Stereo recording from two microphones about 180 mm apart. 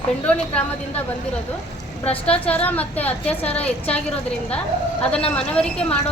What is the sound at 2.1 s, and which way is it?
Speech, 35° left (ahead or behind).